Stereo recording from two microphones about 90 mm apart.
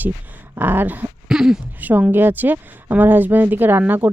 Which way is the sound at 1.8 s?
20° right (ahead or behind).